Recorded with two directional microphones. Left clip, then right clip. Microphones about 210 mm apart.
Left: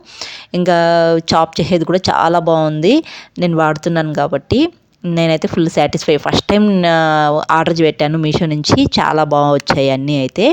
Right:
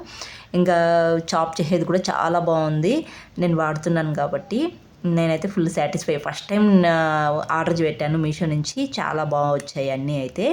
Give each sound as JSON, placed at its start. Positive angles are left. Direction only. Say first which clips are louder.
{"t": 0.5, "sound": "speech", "louder": "left 6 dB", "side_deg": 40}
{"t": 6.6, "sound": "speech", "louder": "left 1 dB", "side_deg": 30}